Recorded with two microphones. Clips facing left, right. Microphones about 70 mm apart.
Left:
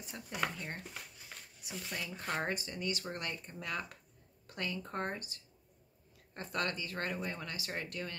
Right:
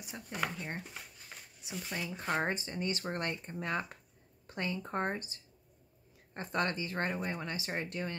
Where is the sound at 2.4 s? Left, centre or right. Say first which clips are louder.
Right 2 dB; right.